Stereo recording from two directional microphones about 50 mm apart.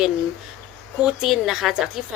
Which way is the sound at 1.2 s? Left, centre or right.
Centre.